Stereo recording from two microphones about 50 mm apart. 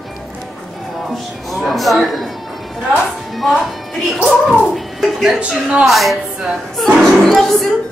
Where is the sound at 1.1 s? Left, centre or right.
Centre.